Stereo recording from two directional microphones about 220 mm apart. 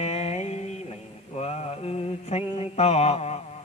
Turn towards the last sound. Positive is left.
turn(degrees=30)  # may be behind; listen again after turning